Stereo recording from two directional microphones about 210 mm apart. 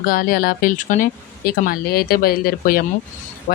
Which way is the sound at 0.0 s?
45° left (ahead or behind).